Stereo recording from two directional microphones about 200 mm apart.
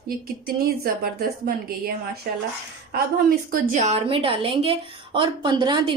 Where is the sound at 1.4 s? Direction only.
50° right (ahead or behind).